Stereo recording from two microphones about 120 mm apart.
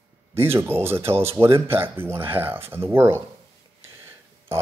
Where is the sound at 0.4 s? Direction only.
20° right (ahead or behind).